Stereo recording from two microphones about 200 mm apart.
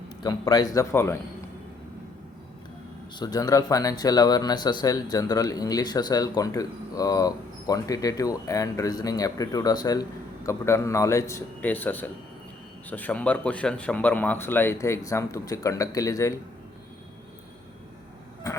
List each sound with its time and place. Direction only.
0.2 s speech: 20° left (ahead or behind)
3.2 s speech: 20° left (ahead or behind)
18.5 s vehicle: 15° left (ahead or behind)